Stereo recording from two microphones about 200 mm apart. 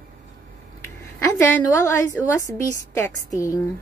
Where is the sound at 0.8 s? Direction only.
15° left (ahead or behind).